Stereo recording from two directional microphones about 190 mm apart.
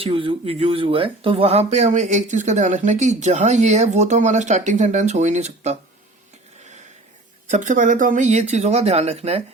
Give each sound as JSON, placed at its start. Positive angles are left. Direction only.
{"t": 0.0, "sound": "speech", "side_deg": -25}
{"t": 7.5, "sound": "speech", "side_deg": -40}